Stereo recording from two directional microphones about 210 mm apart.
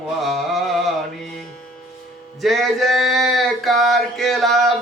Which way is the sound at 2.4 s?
Centre (ahead or behind).